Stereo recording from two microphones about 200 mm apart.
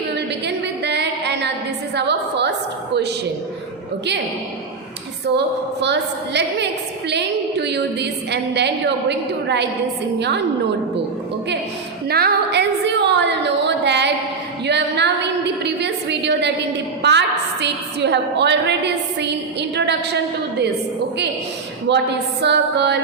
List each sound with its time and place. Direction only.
0.4 s a sound: 60° right (ahead or behind)
2.0 s a woman's voice: 60° right (ahead or behind)
5.8 s a woman's voice: 60° right (ahead or behind)
12.0 s a sound: 50° right (ahead or behind)
17.0 s a woman's voice: 60° right (ahead or behind)
21.8 s a woman's voice: 60° right (ahead or behind)